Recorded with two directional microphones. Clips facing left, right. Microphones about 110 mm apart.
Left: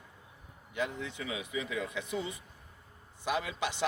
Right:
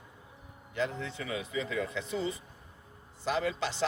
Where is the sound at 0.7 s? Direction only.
10° left (ahead or behind).